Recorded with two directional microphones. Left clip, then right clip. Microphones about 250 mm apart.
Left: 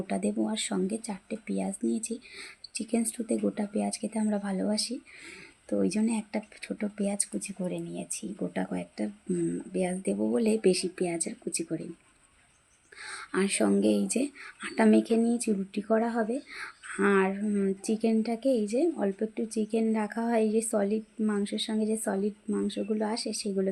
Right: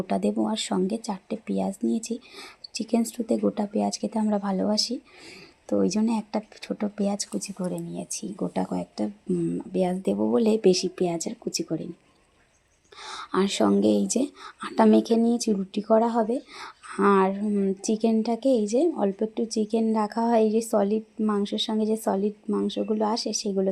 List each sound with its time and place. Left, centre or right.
0.1 s speech: centre
13.0 s speech: centre